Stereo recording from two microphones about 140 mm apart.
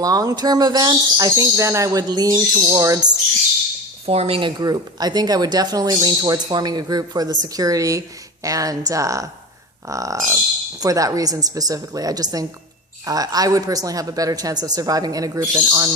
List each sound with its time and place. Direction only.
0.0 s speech: 25° right (ahead or behind)
4.0 s speech: 45° right (ahead or behind); by 15.9 s 25° right (ahead or behind)